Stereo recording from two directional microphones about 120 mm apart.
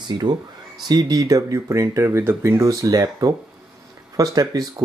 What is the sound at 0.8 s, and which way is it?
Speech, 35° right (ahead or behind).